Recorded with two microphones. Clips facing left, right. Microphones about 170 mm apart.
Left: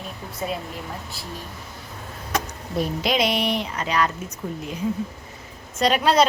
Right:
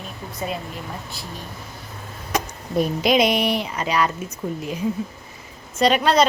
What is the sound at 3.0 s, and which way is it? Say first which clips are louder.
Music: right 4 dB; 15° right (ahead or behind).